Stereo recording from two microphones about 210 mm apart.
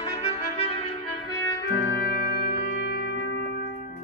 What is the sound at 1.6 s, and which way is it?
Music, 45° left (ahead or behind).